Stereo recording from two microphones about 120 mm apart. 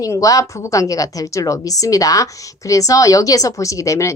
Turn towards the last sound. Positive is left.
turn(degrees=25)  # may be behind; listen again after turning